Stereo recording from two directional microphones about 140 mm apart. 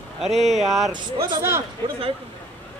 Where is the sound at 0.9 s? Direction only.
35° right (ahead or behind).